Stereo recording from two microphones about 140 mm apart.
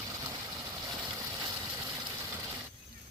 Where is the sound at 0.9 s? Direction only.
30° right (ahead or behind).